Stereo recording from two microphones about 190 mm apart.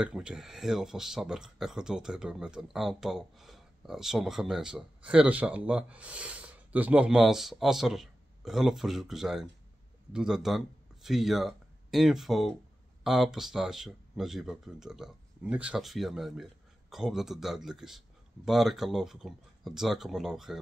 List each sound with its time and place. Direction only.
0.0 s speech: 5° right (ahead or behind)